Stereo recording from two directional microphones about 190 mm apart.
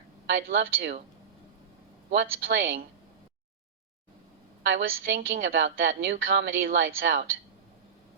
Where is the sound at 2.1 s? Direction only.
65° right (ahead or behind).